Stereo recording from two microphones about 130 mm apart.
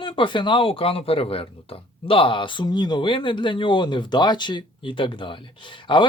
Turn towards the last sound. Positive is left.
turn(degrees=35)  # may be behind; listen again after turning